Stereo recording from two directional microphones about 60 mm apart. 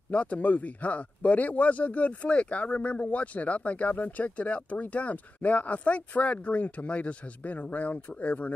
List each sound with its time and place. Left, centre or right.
0.1 s speech: left